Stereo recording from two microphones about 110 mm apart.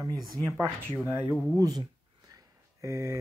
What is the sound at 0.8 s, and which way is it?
Speech, 15° right (ahead or behind).